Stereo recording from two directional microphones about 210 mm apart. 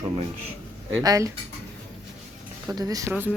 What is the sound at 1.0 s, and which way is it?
Speech, 15° right (ahead or behind).